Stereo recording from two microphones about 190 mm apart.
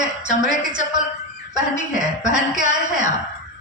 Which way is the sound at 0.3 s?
45° right (ahead or behind).